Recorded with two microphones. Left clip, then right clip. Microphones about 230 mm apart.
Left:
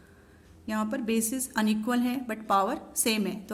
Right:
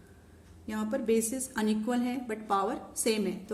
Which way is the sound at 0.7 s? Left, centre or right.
Left.